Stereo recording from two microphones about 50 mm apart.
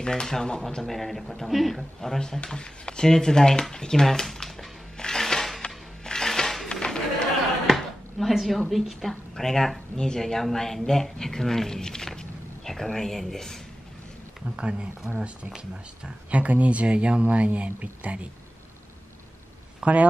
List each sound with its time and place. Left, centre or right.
0.0 s speech: centre
4.9 s a sound: centre
7.6 s a sound: centre
9.4 s speech: centre
14.6 s speech: centre
19.8 s speech: right